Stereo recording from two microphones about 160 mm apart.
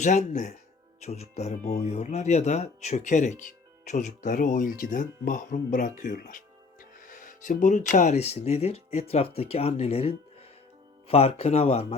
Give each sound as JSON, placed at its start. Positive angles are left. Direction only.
{"t": 0.0, "sound": "speech", "side_deg": 50}